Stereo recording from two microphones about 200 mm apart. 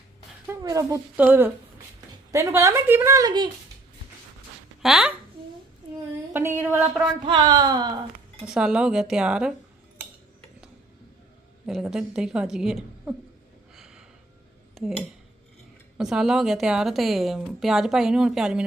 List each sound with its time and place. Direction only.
0.4 s a woman's voice: 15° right (ahead or behind)
4.8 s speech: centre (ahead or behind)
6.3 s a woman's voice: 10° right (ahead or behind)
7.3 s speech: 20° right (ahead or behind)
8.4 s a woman's voice: 5° right (ahead or behind)
11.6 s a woman's voice: centre (ahead or behind)
13.7 s a sound: centre (ahead or behind)
14.8 s a woman's voice: centre (ahead or behind)